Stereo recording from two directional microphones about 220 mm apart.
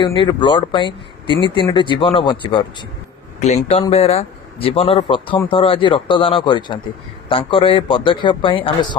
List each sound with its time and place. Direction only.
0.0 s a man's voice: 20° left (ahead or behind)